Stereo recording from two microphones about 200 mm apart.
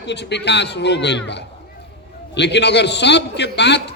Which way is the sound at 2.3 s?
60° left (ahead or behind).